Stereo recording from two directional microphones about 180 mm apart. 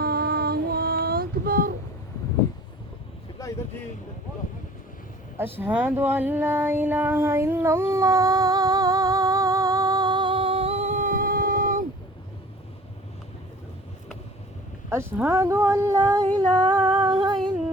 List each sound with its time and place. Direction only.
0.0 s child singing: 60° right (ahead or behind)
5.5 s a sound: 10° right (ahead or behind); by 11.8 s 50° right (ahead or behind)
14.8 s speech: 15° right (ahead or behind)